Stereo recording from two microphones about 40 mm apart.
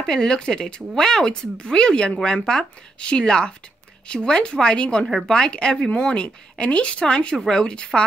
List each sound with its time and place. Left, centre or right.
0.0 s speech: centre
5.0 s speech: centre
5.3 s speech: centre